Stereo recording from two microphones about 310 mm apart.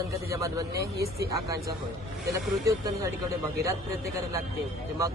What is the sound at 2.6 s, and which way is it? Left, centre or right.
Speech, centre.